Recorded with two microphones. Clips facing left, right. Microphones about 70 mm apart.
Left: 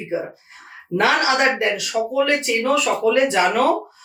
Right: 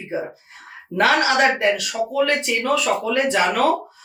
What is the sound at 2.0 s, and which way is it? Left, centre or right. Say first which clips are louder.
Speech: left 2 dB; left.